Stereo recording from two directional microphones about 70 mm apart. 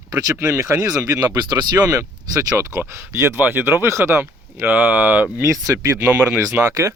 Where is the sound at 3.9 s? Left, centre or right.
Right.